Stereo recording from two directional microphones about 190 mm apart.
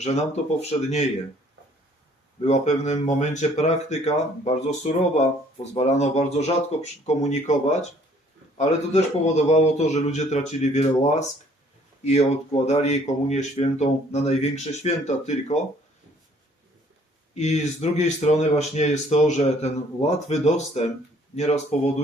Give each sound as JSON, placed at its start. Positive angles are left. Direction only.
{"t": 0.0, "sound": "speech", "side_deg": 35}
{"t": 2.4, "sound": "speech", "side_deg": 35}
{"t": 17.3, "sound": "speech", "side_deg": 35}